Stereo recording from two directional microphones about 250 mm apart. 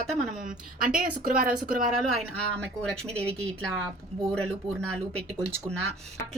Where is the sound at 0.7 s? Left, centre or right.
Right.